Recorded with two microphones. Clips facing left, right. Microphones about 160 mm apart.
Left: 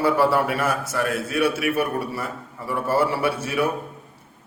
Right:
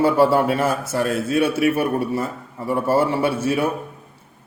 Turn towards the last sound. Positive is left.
turn(degrees=-25)  # may be behind; listen again after turning